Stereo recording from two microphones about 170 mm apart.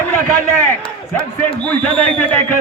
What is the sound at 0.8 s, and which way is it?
Speech, 35° left (ahead or behind).